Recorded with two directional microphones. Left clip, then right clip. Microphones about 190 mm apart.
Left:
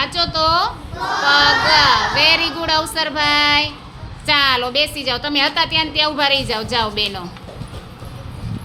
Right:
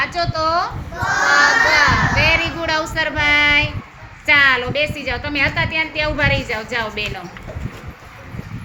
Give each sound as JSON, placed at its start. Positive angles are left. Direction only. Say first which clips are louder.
{"t": 0.0, "sound": "a woman's voice", "louder": "left 2 dB", "side_deg": 20}